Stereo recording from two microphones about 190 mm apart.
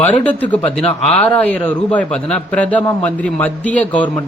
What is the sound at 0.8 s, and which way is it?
Speech, 30° left (ahead or behind).